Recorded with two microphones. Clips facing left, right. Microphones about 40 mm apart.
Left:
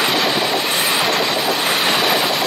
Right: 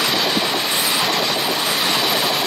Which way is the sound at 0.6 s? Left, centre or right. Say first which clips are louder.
Left 2 dB; left.